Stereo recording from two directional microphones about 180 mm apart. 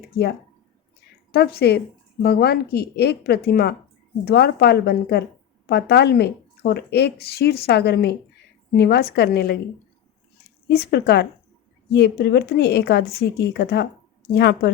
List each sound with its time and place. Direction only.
1.3 s a woman's voice: 60° left (ahead or behind)
10.7 s a woman's voice: 60° left (ahead or behind)